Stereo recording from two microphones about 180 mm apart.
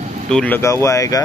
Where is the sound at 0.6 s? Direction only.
15° left (ahead or behind).